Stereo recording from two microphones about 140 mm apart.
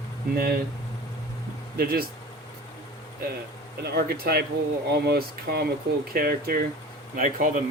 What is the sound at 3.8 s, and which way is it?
Speech, 90° right.